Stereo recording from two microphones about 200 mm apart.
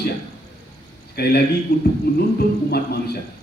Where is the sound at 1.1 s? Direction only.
50° left (ahead or behind).